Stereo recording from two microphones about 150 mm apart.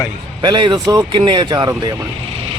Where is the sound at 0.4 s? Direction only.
30° right (ahead or behind).